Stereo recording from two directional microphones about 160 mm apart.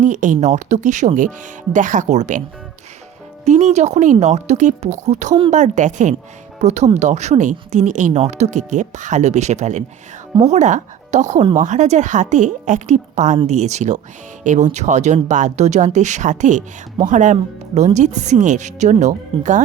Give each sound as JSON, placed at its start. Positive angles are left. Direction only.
{"t": 0.0, "sound": "speech", "side_deg": -50}
{"t": 3.4, "sound": "speech", "side_deg": -45}